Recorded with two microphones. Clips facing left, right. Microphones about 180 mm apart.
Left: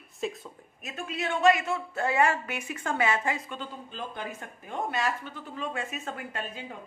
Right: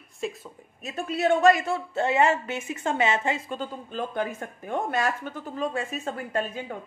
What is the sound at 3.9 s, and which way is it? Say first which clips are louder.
Speech: right 10 dB; 50° right (ahead or behind).